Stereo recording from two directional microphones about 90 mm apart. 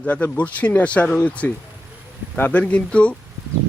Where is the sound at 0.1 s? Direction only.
15° left (ahead or behind).